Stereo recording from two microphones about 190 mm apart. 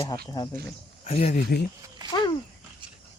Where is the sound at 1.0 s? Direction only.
35° left (ahead or behind).